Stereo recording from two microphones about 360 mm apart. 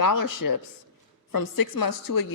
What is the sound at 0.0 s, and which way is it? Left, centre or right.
A woman's voice, left.